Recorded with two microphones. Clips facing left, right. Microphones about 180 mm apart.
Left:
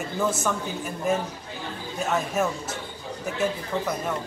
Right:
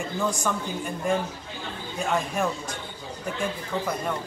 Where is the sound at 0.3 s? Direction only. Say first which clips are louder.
Left 1 dB; 5° left (ahead or behind).